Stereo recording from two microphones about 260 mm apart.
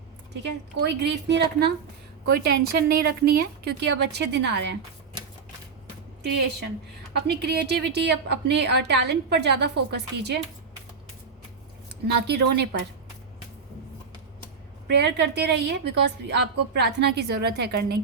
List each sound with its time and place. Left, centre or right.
0.4 s a woman's voice: right
7.1 s a woman's voice: right
12.1 s a woman's voice: right
14.8 s a woman's voice: right